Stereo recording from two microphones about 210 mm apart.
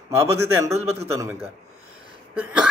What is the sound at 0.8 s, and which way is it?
Speech, 30° right (ahead or behind).